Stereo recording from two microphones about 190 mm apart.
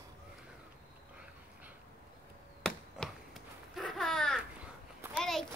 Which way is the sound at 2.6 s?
Centre (ahead or behind).